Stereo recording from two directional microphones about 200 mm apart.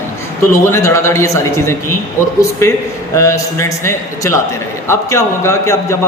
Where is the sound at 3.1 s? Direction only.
15° left (ahead or behind).